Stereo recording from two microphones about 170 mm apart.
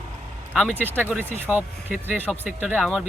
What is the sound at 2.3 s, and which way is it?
Speech, 10° left (ahead or behind).